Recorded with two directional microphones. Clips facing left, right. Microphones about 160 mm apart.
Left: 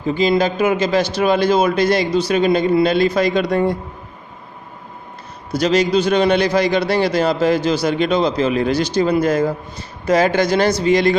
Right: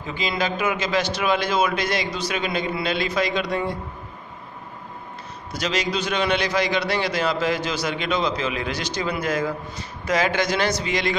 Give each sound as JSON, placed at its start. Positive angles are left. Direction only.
{"t": 0.0, "sound": "a man's voice", "side_deg": 40}
{"t": 5.5, "sound": "a man's voice", "side_deg": 35}